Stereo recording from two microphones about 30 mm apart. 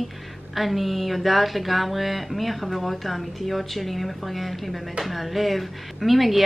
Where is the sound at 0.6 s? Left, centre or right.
Centre.